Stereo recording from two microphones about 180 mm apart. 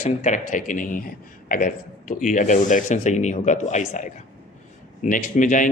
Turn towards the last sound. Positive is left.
turn(degrees=45)  # may be behind; listen again after turning